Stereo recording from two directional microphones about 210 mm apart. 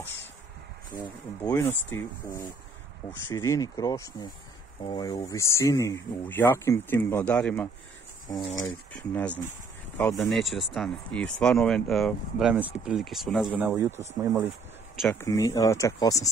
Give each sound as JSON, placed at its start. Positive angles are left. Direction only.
{"t": 1.4, "sound": "speech", "side_deg": 10}
{"t": 15.1, "sound": "speech", "side_deg": 15}